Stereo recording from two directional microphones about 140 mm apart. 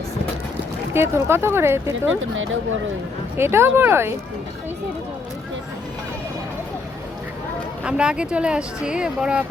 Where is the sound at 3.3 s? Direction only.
15° right (ahead or behind).